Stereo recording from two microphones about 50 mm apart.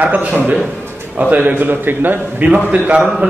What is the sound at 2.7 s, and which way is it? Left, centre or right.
Speech, right.